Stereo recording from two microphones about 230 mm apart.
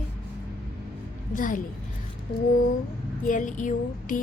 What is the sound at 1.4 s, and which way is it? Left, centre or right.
Speech, left.